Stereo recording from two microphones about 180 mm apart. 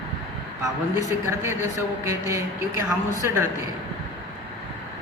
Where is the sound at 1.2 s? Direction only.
15° right (ahead or behind).